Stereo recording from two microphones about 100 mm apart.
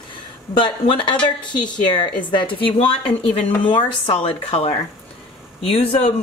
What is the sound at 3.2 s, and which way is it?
Speech, 90° left.